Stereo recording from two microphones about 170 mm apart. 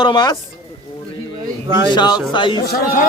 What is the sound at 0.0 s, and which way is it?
Speech, 25° left (ahead or behind).